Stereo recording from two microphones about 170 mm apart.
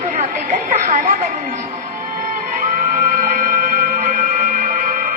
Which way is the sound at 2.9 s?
50° right (ahead or behind).